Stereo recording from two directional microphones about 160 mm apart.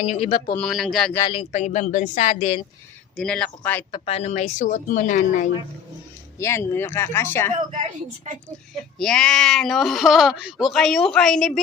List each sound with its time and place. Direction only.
0.0 s speech: 40° left (ahead or behind)
0.5 s speech: centre (ahead or behind)
1.5 s speech: 45° left (ahead or behind)
3.2 s speech: 5° left (ahead or behind)
3.9 s speech: 40° left (ahead or behind)
6.4 s speech: 15° left (ahead or behind)
7.5 s a woman's voice: 50° right (ahead or behind)
9.0 s speech: 5° left (ahead or behind)